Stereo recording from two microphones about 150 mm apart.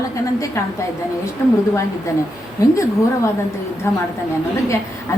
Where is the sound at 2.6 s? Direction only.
20° left (ahead or behind).